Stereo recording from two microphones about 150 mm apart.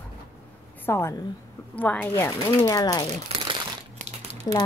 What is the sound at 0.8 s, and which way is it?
A woman's voice, 15° left (ahead or behind).